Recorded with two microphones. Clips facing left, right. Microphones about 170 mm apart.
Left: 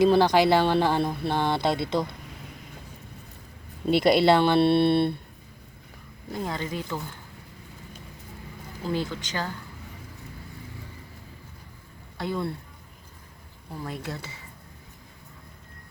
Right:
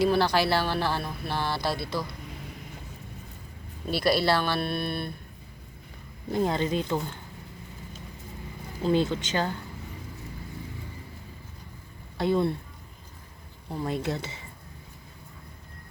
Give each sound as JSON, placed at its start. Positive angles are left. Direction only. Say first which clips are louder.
{"t": 0.0, "sound": "speech", "louder": "left 4 dB", "side_deg": 20}
{"t": 3.8, "sound": "speech", "louder": "left 5 dB", "side_deg": 20}
{"t": 6.3, "sound": "speech", "louder": "right 5 dB", "side_deg": -25}
{"t": 8.8, "sound": "speech", "louder": "right 5 dB", "side_deg": -25}
{"t": 12.1, "sound": "speech", "louder": "right 5 dB", "side_deg": -25}
{"t": 13.8, "sound": "speech", "louder": "right 5 dB", "side_deg": -25}